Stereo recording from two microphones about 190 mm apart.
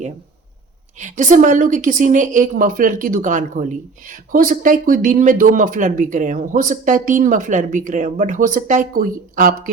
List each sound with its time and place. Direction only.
0.9 s a woman's voice: 40° right (ahead or behind)